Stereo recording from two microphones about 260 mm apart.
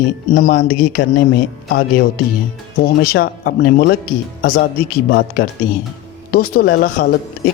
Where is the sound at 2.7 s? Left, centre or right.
Left.